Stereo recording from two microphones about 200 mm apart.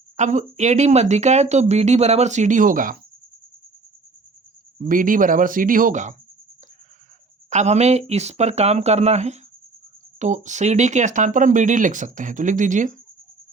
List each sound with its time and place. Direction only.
0.2 s speech: 35° right (ahead or behind)
4.8 s speech: 45° right (ahead or behind)
7.5 s speech: 35° right (ahead or behind)